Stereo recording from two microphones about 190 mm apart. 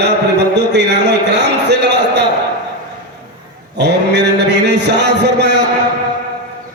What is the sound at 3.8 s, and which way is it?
Mantra, 60° right (ahead or behind).